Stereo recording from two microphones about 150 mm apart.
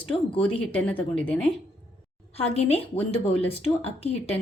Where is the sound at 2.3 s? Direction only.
45° left (ahead or behind).